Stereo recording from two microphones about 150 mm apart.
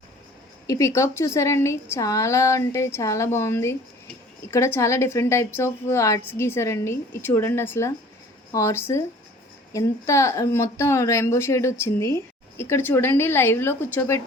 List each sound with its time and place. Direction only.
0.7 s a woman's voice: 20° left (ahead or behind)